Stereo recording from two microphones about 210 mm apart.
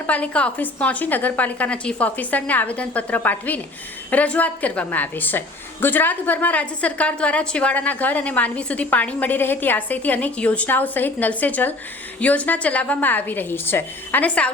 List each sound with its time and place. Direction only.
0.0 s a woman's voice: 5° left (ahead or behind)